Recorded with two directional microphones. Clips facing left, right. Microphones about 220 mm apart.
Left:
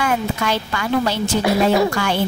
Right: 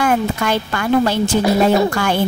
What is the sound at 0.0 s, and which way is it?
Speech, 50° right (ahead or behind).